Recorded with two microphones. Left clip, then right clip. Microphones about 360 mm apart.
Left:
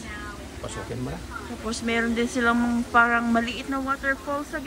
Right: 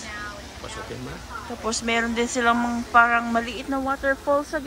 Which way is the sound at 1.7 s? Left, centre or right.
Centre.